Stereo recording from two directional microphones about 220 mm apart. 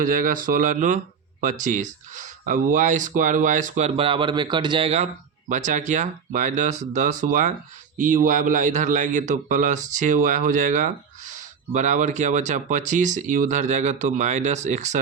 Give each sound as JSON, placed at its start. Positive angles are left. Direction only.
{"t": 0.0, "sound": "a man's voice", "side_deg": -40}